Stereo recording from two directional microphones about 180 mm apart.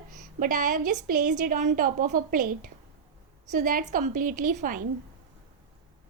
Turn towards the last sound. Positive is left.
turn(degrees=-50)  # may be behind; listen again after turning